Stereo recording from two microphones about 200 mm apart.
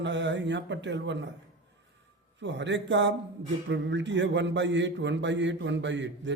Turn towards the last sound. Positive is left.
turn(degrees=-65)  # may be behind; listen again after turning